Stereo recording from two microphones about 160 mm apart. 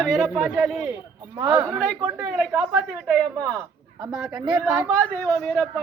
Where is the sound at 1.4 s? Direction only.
15° right (ahead or behind).